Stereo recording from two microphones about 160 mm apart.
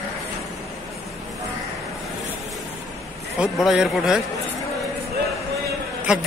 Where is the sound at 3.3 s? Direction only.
5° right (ahead or behind).